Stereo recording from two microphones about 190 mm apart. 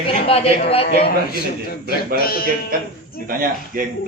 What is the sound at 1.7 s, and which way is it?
Speech, 50° left (ahead or behind).